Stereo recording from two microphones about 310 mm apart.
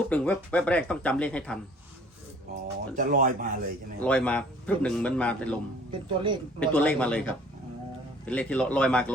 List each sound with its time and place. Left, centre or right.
0.0 s a man's voice: centre
2.9 s speech: right
4.0 s a man's voice: centre
5.9 s speech: centre
6.7 s a man's voice: centre
8.3 s a man's voice: centre